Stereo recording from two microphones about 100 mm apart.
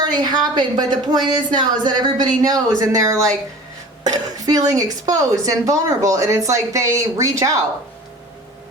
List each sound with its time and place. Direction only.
0.0 s a woman's voice: 45° right (ahead or behind)